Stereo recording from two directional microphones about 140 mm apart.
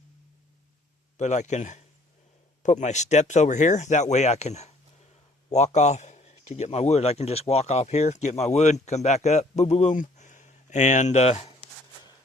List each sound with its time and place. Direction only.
1.1 s a man's voice: 55° left (ahead or behind)